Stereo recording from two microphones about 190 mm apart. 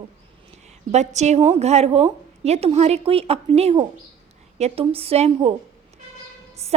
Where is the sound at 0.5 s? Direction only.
35° right (ahead or behind).